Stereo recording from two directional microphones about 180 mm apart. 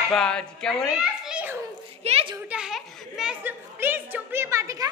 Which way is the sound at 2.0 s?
35° right (ahead or behind).